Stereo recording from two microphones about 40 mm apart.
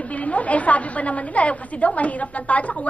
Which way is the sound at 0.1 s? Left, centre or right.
Left.